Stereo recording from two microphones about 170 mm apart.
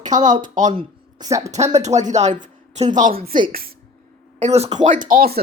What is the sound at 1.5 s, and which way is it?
A woman's voice, 40° right (ahead or behind).